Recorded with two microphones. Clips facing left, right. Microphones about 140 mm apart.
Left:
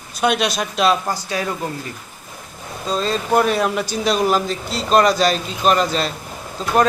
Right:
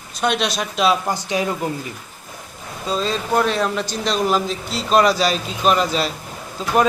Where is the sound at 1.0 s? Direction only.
15° right (ahead or behind).